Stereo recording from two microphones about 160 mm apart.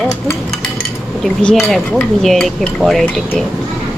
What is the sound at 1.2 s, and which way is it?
Speech, 5° left (ahead or behind).